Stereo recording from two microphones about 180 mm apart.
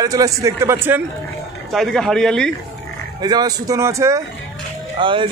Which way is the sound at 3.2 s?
20° right (ahead or behind).